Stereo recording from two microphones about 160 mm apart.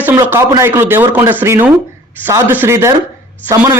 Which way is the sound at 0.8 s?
15° right (ahead or behind).